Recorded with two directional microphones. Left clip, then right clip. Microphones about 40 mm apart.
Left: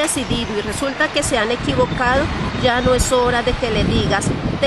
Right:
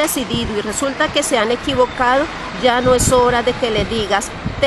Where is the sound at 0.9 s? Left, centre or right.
Right.